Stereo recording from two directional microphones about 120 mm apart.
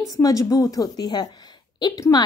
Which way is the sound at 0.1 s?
30° left (ahead or behind).